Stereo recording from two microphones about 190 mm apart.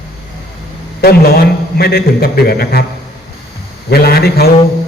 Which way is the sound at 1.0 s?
55° left (ahead or behind).